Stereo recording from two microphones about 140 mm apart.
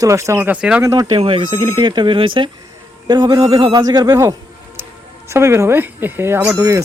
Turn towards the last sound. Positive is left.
turn(degrees=-20)  # may be behind; listen again after turning